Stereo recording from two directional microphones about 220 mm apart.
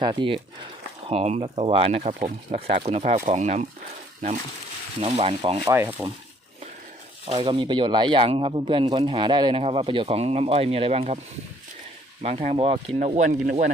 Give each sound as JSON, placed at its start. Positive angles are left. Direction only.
{"t": 0.0, "sound": "speech", "side_deg": -20}
{"t": 4.9, "sound": "speech", "side_deg": -25}
{"t": 5.7, "sound": "speech", "side_deg": -10}
{"t": 7.3, "sound": "speech", "side_deg": -25}
{"t": 12.2, "sound": "speech", "side_deg": -30}